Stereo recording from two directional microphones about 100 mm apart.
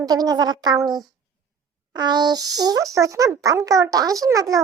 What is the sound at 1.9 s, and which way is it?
Speech, 45° right (ahead or behind).